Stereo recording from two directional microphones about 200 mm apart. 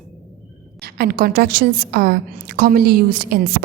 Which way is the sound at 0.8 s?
50° right (ahead or behind).